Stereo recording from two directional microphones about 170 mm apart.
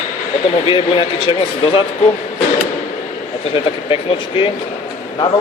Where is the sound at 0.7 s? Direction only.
30° left (ahead or behind).